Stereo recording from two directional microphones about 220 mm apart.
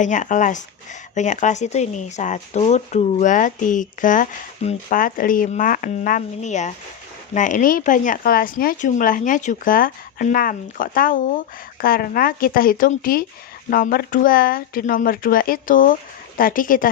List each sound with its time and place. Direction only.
0.0 s speech: 35° left (ahead or behind)